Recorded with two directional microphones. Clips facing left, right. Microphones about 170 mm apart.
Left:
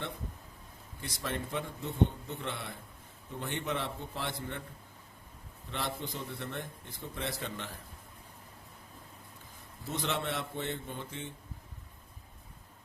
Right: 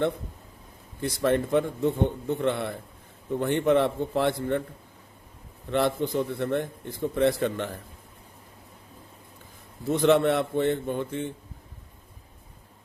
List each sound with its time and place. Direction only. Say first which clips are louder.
1.0 s a man's voice: right 14 dB; 60° right (ahead or behind)
5.7 s a man's voice: right 14 dB; 60° right (ahead or behind)
9.9 s a man's voice: right 14 dB; 55° right (ahead or behind)